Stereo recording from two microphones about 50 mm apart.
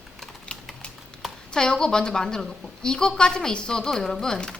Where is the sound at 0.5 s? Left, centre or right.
Left.